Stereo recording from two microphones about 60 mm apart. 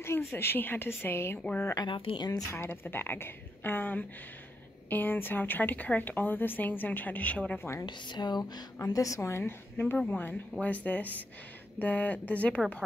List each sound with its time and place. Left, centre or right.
0.0 s speech: left
1.8 s speech: left
2.5 s speech: left
8.2 s speech: left
8.8 s a woman's voice: left
9.4 s speech: left